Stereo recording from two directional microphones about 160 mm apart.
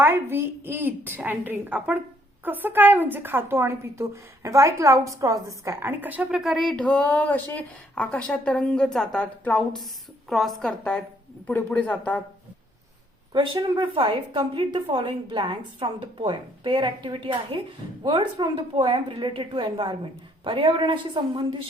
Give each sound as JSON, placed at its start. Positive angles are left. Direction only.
{"t": 0.0, "sound": "a woman's voice", "side_deg": -15}
{"t": 13.3, "sound": "a woman's voice", "side_deg": -30}